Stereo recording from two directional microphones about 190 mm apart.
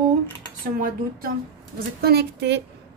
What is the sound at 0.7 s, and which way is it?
A woman's voice, 50° right (ahead or behind).